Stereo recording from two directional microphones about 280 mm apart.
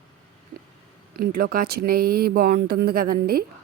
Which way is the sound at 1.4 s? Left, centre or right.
Right.